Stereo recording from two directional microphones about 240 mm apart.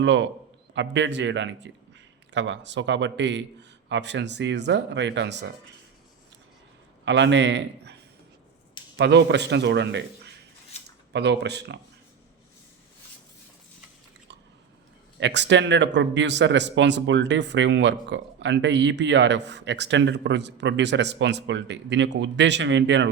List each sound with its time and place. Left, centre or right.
0.0 s speech: right
7.0 s a man's voice: right
9.0 s speech: right
11.1 s speech: right
15.2 s speech: right